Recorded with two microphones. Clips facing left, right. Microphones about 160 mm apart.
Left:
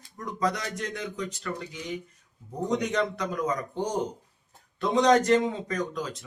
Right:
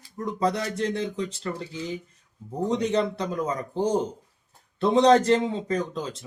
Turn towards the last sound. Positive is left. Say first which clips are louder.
# right 2 dB
turn(degrees=-30)  # may be behind; listen again after turning